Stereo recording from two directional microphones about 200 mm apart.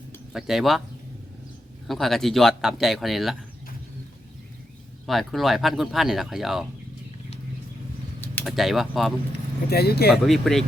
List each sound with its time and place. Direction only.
0.3 s speech: centre (ahead or behind)
1.9 s speech: centre (ahead or behind)
5.0 s speech: centre (ahead or behind)
8.4 s speech: centre (ahead or behind)
9.6 s speech: 50° left (ahead or behind)
10.2 s speech: centre (ahead or behind)